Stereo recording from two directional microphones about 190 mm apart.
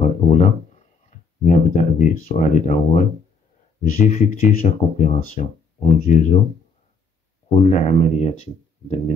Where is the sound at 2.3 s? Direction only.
40° left (ahead or behind).